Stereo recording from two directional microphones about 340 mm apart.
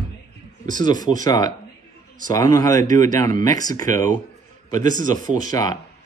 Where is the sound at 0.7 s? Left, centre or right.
Centre.